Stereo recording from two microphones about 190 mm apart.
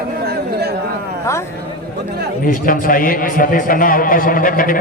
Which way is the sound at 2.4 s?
45° left (ahead or behind).